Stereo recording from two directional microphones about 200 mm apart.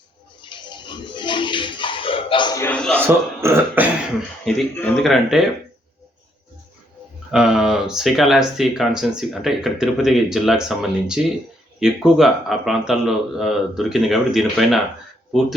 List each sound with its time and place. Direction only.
0.4 s a sound: 25° left (ahead or behind)
2.6 s a man's voice: 5° left (ahead or behind)
3.0 s speech: 10° right (ahead or behind)
4.4 s speech: 5° left (ahead or behind)
7.3 s speech: 5° right (ahead or behind)